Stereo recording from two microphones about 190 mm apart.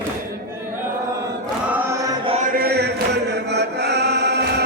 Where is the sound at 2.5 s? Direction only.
50° right (ahead or behind).